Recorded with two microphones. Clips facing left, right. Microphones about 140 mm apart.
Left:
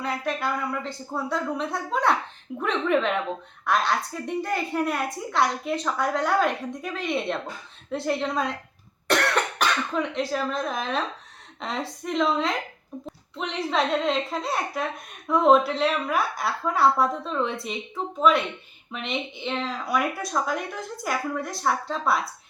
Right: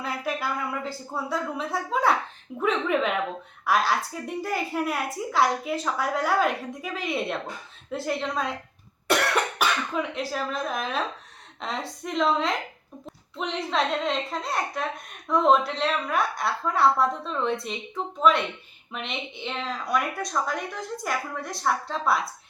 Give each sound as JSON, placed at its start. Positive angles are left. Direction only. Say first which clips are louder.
{"t": 0.0, "sound": "a woman's voice", "louder": "left 2 dB", "side_deg": -5}
{"t": 9.0, "sound": "cough", "louder": "even", "side_deg": -5}
{"t": 11.6, "sound": "a woman's voice", "louder": "left 1 dB", "side_deg": 0}
{"t": 18.9, "sound": "a woman's voice", "louder": "left 3 dB", "side_deg": 0}